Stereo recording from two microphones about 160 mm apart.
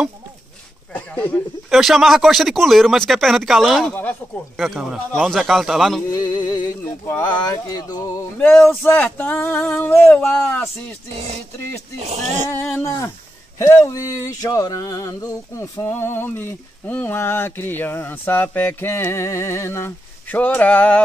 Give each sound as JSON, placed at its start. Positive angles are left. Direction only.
{"t": 0.9, "sound": "speech", "side_deg": 10}
{"t": 1.7, "sound": "speech", "side_deg": 0}
{"t": 3.9, "sound": "a sound", "side_deg": 10}
{"t": 4.6, "sound": "speech", "side_deg": 0}
{"t": 6.1, "sound": "speech", "side_deg": 25}
{"t": 8.4, "sound": "a sound", "side_deg": 5}
{"t": 12.0, "sound": "speech", "side_deg": -45}
{"t": 12.4, "sound": "speech", "side_deg": 20}
{"t": 13.6, "sound": "a sound", "side_deg": 20}